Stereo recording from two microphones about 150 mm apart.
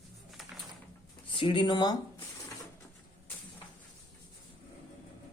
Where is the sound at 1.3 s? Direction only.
35° left (ahead or behind).